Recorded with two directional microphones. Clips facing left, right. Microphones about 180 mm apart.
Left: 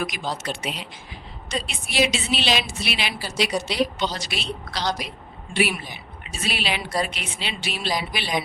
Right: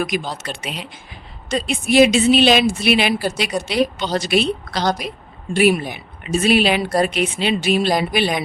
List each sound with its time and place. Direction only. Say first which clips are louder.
0.1 s speech: right 10 dB; 50° right (ahead or behind)
1.5 s speech: right 11 dB; 50° right (ahead or behind)